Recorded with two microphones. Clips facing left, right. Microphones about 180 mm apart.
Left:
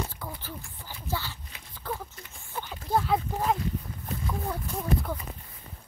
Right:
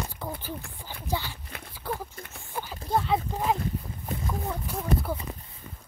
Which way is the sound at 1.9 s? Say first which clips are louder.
Right 2 dB; 65° right (ahead or behind).